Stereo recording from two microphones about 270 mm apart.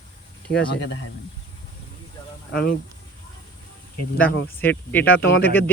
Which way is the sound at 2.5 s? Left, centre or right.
Left.